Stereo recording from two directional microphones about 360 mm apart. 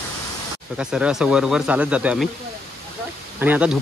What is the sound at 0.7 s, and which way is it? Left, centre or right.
Speech, centre.